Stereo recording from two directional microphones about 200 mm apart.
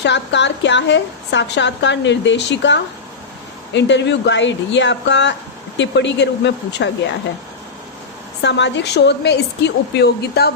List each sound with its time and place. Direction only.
0.0 s a woman's voice: 60° left (ahead or behind)
8.4 s a woman's voice: 60° left (ahead or behind)